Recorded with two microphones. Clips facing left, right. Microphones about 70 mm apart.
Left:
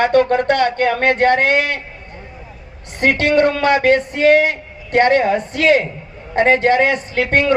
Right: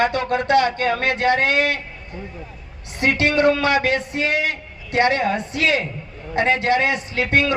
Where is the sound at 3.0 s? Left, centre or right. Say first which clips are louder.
Left 4 dB; left.